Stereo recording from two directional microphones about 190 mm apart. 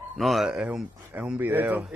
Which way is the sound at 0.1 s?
Centre (ahead or behind).